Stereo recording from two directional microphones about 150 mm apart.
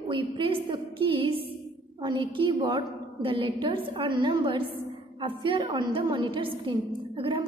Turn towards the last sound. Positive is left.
turn(degrees=-35)  # may be behind; listen again after turning